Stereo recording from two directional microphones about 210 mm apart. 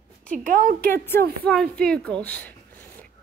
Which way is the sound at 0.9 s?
10° left (ahead or behind).